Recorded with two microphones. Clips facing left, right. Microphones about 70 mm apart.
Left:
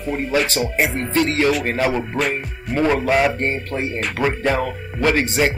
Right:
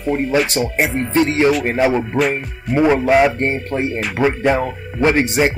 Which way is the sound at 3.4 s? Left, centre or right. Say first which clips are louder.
Right 3 dB; right.